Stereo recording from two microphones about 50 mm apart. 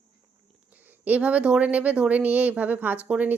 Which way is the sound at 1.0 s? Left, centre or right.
Right.